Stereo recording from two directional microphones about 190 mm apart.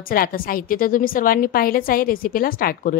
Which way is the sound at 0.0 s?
50° left (ahead or behind).